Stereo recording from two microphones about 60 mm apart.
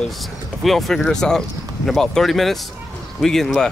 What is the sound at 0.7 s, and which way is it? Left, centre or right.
Speech, centre.